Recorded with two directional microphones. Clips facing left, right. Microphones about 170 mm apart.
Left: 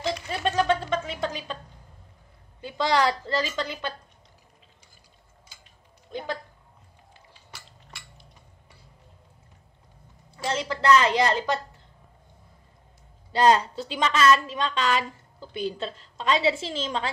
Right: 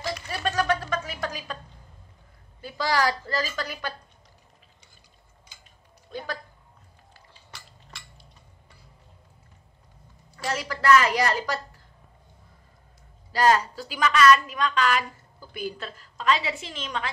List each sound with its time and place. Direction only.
0.0 s a sound: 25° left (ahead or behind)
2.6 s a woman's voice: 20° left (ahead or behind)
6.1 s a woman's voice: 20° left (ahead or behind)
10.3 s a woman's voice: 25° left (ahead or behind)
13.3 s a woman's voice: 25° left (ahead or behind)